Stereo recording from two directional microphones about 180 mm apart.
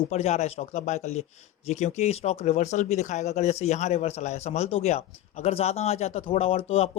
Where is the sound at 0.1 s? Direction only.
35° left (ahead or behind).